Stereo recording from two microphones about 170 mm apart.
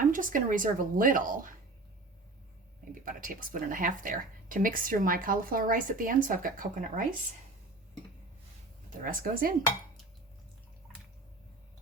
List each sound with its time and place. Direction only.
0.0 s speech: 50° right (ahead or behind)
2.9 s speech: 55° right (ahead or behind)
8.9 s speech: 55° right (ahead or behind)